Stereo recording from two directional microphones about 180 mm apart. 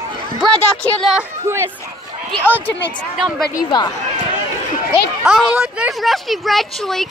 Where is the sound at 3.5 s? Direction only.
20° left (ahead or behind).